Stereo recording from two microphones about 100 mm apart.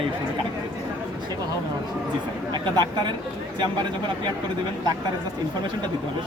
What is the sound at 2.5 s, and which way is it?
Speech, 45° right (ahead or behind).